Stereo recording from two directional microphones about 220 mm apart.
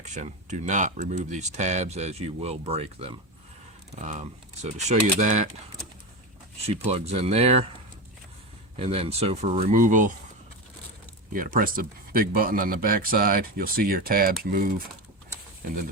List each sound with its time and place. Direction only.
0.0 s speech: 35° right (ahead or behind)
6.7 s speech: 30° right (ahead or behind)
8.7 s speech: 25° right (ahead or behind)
11.3 s speech: 40° right (ahead or behind)